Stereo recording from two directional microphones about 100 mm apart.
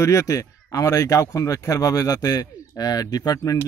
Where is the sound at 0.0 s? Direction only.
30° left (ahead or behind).